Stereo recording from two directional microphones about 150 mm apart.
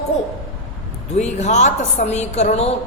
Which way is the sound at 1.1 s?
50° left (ahead or behind).